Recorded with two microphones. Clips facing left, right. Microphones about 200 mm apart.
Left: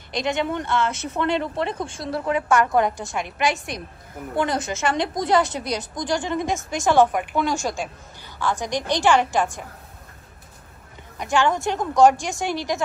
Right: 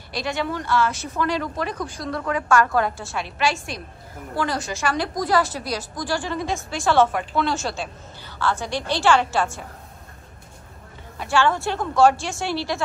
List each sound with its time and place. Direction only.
0.1 s a woman's voice: 20° left (ahead or behind)
11.1 s a woman's voice: 15° left (ahead or behind)